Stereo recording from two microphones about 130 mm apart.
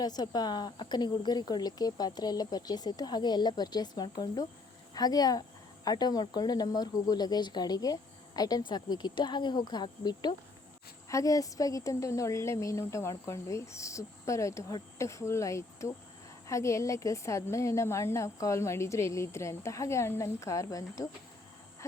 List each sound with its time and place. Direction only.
0.0 s a woman's voice: 30° left (ahead or behind)